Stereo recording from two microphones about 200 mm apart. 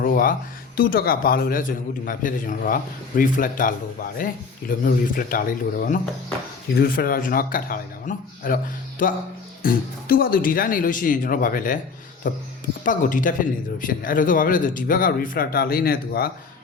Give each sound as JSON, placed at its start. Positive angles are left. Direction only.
{"t": 0.0, "sound": "a sound", "side_deg": 45}
{"t": 0.8, "sound": "speech", "side_deg": 45}
{"t": 4.9, "sound": "speech", "side_deg": 45}